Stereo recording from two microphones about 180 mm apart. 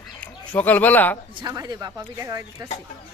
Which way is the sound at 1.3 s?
25° right (ahead or behind).